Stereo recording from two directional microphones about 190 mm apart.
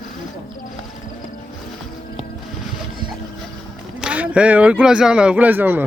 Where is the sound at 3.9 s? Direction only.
5° right (ahead or behind).